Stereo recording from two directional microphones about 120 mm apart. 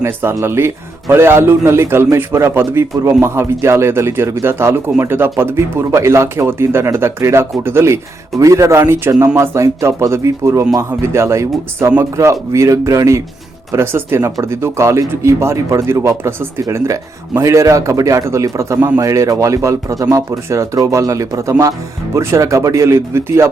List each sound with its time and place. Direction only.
0.0 s speech: 20° right (ahead or behind)